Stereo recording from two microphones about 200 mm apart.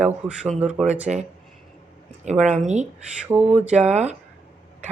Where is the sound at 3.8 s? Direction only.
35° right (ahead or behind).